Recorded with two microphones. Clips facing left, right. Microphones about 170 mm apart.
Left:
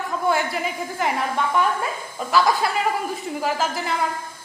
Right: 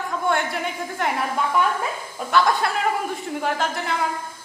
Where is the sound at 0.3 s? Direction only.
Centre (ahead or behind).